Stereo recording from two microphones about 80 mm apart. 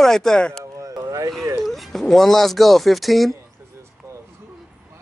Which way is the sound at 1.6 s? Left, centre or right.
Centre.